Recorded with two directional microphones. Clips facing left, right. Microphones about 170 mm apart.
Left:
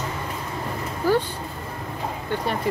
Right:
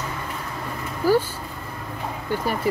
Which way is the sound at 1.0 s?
5° right (ahead or behind).